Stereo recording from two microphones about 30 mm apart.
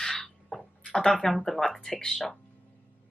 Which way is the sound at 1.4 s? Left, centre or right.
Centre.